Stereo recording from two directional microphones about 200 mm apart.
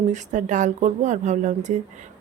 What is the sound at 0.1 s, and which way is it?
Speech, 40° right (ahead or behind).